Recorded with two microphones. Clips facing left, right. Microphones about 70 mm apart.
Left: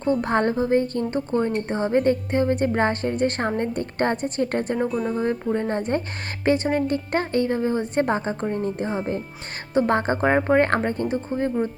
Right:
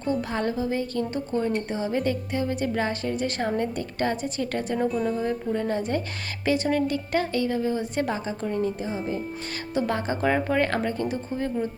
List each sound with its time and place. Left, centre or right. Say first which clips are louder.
0.1 s a woman's voice: left 5 dB; left
4.9 s speech: left 1 dB; centre
5.2 s a woman's voice: left 3 dB; left
6.9 s a woman's voice: left 3 dB; left
8.8 s speech: left 3 dB; left
9.7 s a woman's voice: left 6 dB; left